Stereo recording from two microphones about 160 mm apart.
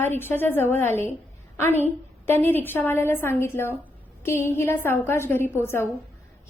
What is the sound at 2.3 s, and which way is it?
A woman's voice, 15° left (ahead or behind).